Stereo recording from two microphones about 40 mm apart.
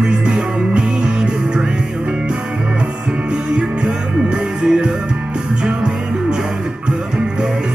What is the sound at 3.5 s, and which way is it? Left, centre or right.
Music, right.